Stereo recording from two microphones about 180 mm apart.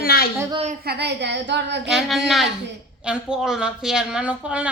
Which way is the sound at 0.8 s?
70° right (ahead or behind).